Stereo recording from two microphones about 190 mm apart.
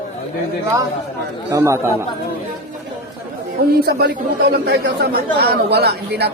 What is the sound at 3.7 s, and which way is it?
Speech, 55° right (ahead or behind).